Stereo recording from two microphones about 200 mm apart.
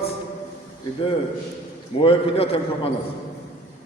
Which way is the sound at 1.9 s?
30° left (ahead or behind).